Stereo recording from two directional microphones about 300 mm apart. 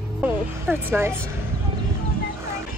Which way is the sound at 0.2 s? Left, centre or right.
Centre.